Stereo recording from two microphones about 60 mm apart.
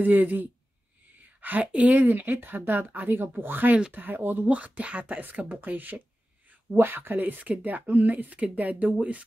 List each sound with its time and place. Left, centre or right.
0.0 s speech: right